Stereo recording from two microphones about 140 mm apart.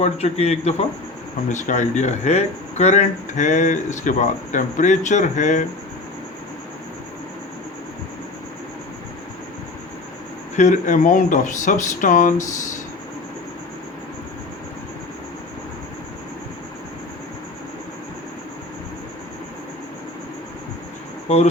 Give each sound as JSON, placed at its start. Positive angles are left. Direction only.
{"t": 0.0, "sound": "a man's voice", "side_deg": 50}
{"t": 1.5, "sound": "speech", "side_deg": 60}
{"t": 10.6, "sound": "speech", "side_deg": 60}